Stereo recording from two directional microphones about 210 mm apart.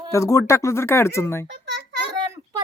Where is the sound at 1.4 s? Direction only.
55° right (ahead or behind).